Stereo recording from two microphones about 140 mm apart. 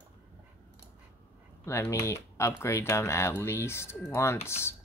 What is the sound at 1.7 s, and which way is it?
Speech, 20° left (ahead or behind).